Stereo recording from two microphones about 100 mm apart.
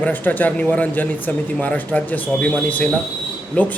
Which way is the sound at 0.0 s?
15° left (ahead or behind).